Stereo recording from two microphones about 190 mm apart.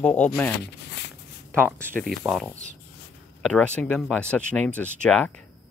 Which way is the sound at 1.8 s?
5° left (ahead or behind).